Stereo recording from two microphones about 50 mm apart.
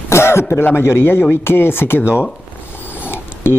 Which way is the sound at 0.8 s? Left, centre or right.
Left.